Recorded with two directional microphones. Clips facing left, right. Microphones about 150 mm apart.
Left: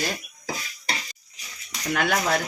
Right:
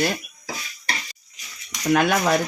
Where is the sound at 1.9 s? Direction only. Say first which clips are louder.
Right 4 dB; 55° right (ahead or behind).